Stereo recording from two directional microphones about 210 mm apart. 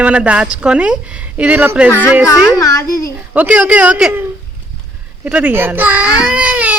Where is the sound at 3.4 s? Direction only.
5° right (ahead or behind).